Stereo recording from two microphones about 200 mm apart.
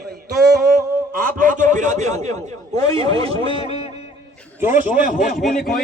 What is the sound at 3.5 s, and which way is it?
Speech, 25° left (ahead or behind).